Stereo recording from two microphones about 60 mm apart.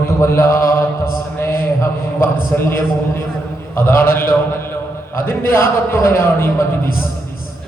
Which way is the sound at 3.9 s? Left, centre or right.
Left.